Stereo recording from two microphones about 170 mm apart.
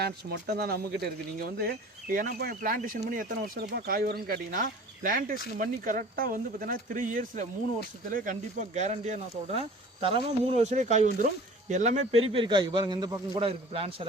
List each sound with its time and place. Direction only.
0.6 s a man's voice: 65° right (ahead or behind); by 14.1 s 35° right (ahead or behind)